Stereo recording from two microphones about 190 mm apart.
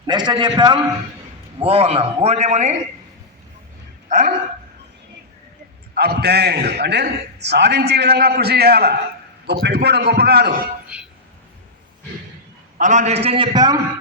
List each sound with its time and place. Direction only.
0.1 s a man's voice: 25° right (ahead or behind)
4.1 s speech: 45° right (ahead or behind)
5.9 s a man's voice: 55° right (ahead or behind)
10.9 s a sound: 5° right (ahead or behind)
12.8 s a man's voice: 40° right (ahead or behind); by 13.7 s 20° right (ahead or behind)